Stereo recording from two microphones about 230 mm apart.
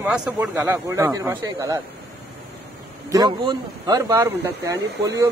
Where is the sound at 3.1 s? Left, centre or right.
Centre.